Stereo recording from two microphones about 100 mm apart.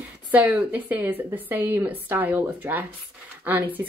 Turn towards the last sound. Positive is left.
turn(degrees=-15)  # may be behind; listen again after turning